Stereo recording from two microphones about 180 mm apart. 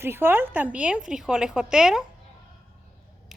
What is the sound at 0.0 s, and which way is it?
A woman's voice, 10° right (ahead or behind).